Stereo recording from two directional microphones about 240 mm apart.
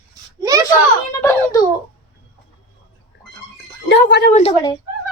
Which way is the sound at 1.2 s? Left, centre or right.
Centre.